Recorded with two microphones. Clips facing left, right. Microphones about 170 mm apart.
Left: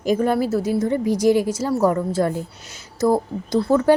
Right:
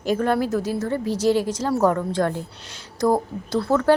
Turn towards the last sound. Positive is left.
turn(degrees=15)  # may be behind; listen again after turning